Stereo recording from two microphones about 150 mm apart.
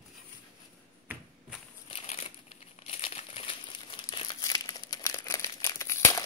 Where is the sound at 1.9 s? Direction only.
45° left (ahead or behind).